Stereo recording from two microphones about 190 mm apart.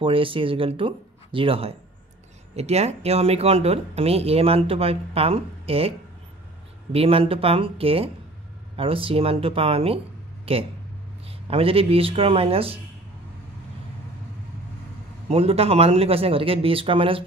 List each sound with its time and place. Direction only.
0.0 s speech: 30° right (ahead or behind)
15.2 s speech: 30° right (ahead or behind)